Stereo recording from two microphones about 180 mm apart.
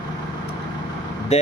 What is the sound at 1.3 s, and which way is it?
Speech, 35° left (ahead or behind).